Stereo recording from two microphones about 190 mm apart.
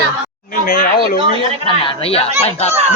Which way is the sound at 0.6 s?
45° left (ahead or behind).